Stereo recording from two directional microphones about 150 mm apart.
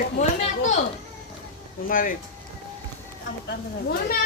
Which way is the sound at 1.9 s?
65° left (ahead or behind).